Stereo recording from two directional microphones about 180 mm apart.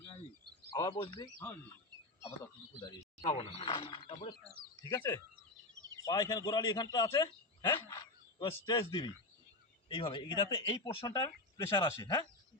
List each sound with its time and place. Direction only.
0.7 s speech: 25° left (ahead or behind)
3.6 s a man's voice: 30° left (ahead or behind)